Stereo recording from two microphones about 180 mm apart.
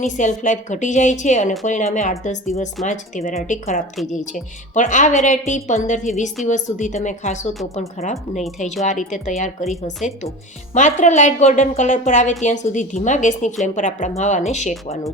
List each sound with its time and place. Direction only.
0.0 s a woman's voice: 40° left (ahead or behind)
8.4 s a woman's voice: 40° left (ahead or behind)